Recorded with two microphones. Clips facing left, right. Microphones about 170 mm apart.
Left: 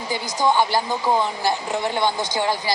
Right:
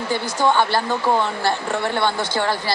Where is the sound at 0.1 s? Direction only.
15° left (ahead or behind).